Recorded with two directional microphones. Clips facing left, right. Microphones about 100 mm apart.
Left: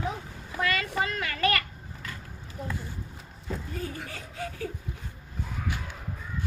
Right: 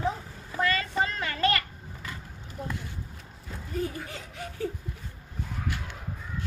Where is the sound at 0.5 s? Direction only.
30° right (ahead or behind).